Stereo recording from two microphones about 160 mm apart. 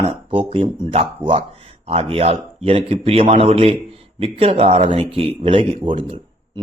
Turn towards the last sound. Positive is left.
turn(degrees=-30)  # may be behind; listen again after turning